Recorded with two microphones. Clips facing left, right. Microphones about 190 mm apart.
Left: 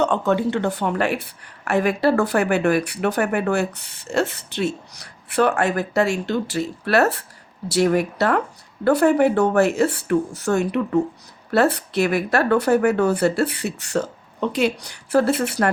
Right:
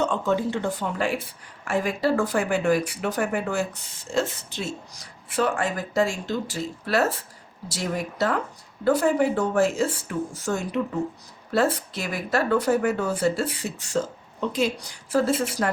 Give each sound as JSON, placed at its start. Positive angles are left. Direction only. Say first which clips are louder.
{"t": 0.0, "sound": "a woman's voice", "louder": "left 4 dB", "side_deg": 65}